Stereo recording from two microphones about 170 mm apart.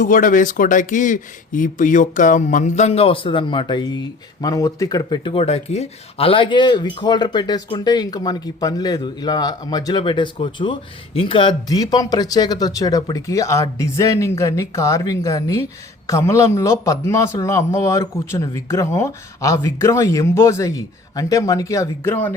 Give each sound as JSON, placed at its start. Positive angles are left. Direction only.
{"t": 0.0, "sound": "speech", "side_deg": 50}